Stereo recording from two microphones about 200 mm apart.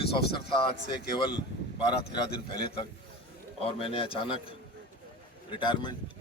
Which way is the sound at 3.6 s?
30° left (ahead or behind).